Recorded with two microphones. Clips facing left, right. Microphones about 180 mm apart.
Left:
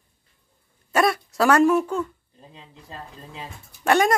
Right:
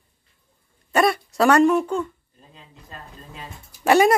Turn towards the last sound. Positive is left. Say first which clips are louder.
# right 3 dB
turn(degrees=-5)  # may be behind; listen again after turning